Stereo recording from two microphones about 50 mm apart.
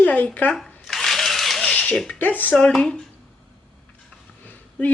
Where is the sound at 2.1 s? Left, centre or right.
Left.